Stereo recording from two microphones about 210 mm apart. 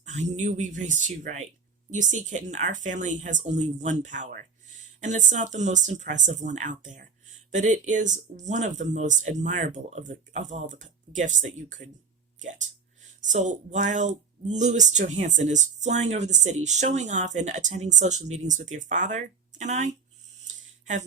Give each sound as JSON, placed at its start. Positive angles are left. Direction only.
{"t": 0.0, "sound": "speech", "side_deg": -35}
{"t": 13.0, "sound": "speech", "side_deg": -35}
{"t": 20.5, "sound": "a sound", "side_deg": -35}